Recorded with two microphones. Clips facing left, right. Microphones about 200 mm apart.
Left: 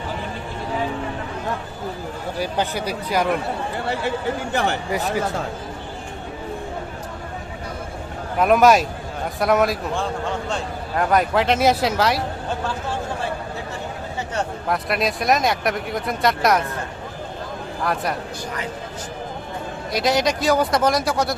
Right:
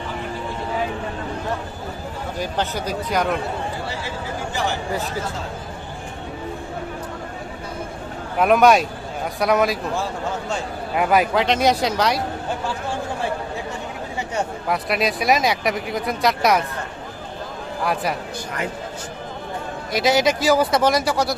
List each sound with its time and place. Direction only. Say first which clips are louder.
2.4 s speech: left 1 dB; 10° left (ahead or behind)
3.8 s speech: left 6 dB; 60° left (ahead or behind)
4.9 s speech: left 3 dB; 15° left (ahead or behind)
8.4 s speech: even; centre (ahead or behind)
14.3 s speech: even; centre (ahead or behind)
19.9 s speech: right 2 dB; centre (ahead or behind)